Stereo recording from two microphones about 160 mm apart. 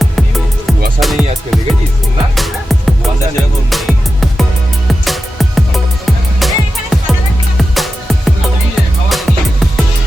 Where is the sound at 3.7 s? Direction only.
Centre (ahead or behind).